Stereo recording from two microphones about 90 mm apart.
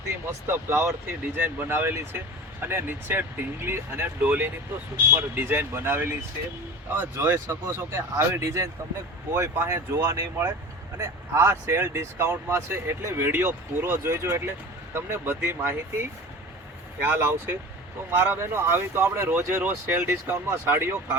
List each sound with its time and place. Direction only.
0.3 s speech: 25° right (ahead or behind)